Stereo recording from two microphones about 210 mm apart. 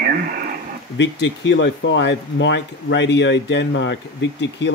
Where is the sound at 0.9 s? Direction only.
60° left (ahead or behind).